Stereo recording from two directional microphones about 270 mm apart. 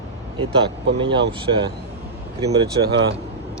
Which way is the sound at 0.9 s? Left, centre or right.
Centre.